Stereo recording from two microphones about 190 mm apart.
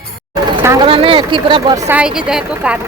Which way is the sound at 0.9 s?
30° right (ahead or behind).